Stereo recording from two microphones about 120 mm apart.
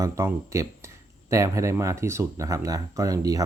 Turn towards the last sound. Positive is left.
turn(degrees=-30)  # may be behind; listen again after turning